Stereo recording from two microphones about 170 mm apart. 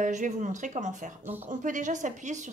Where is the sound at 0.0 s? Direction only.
45° right (ahead or behind).